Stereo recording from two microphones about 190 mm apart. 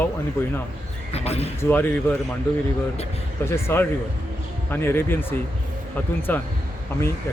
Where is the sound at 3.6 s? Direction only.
15° left (ahead or behind).